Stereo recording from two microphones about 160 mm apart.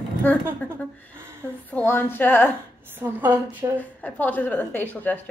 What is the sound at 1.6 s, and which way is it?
Speech, 10° left (ahead or behind).